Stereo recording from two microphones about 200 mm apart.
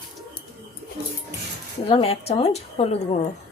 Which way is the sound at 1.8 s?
30° left (ahead or behind).